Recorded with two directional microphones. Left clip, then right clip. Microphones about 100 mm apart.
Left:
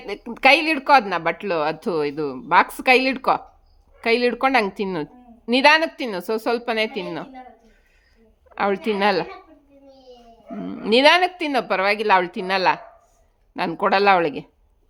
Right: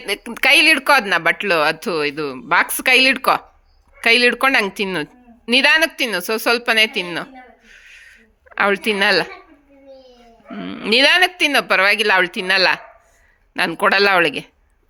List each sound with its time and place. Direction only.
0.0 s a woman's voice: centre (ahead or behind)
1.8 s speech: 20° left (ahead or behind)
2.4 s a woman's voice: 10° left (ahead or behind)
7.7 s a sound: 10° left (ahead or behind)
8.4 s a woman's voice: 10° left (ahead or behind)
10.6 s a woman's voice: 20° left (ahead or behind)